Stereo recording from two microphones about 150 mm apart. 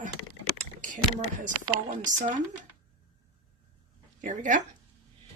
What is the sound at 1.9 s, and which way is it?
Speech, 60° right (ahead or behind).